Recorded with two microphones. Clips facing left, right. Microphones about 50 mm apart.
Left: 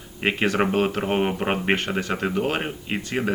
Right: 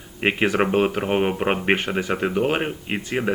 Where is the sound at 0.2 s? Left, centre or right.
Centre.